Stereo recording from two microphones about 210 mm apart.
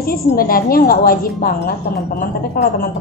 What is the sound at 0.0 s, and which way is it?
Speech, 45° left (ahead or behind).